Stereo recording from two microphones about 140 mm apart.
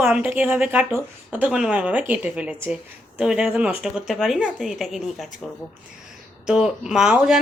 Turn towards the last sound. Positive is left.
turn(degrees=-5)  # may be behind; listen again after turning